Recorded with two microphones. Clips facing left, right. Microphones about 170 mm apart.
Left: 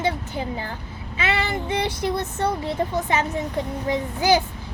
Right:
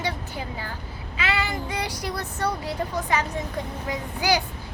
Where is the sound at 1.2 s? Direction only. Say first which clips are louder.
Left 3 dB; 25° left (ahead or behind).